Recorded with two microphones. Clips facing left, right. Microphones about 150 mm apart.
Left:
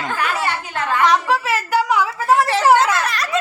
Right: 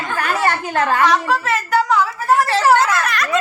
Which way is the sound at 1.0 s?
10° left (ahead or behind).